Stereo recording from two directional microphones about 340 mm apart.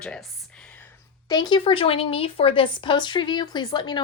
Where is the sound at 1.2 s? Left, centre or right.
Centre.